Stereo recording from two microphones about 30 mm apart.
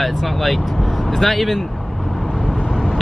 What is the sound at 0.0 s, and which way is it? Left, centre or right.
Speech, centre.